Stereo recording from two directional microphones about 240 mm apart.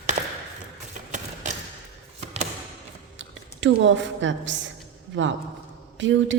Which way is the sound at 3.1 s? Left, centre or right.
Right.